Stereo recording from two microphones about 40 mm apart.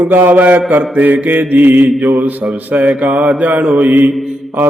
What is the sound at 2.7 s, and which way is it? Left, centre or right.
Mantra, right.